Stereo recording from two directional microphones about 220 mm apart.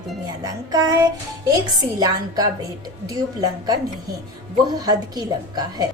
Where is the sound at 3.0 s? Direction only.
15° right (ahead or behind).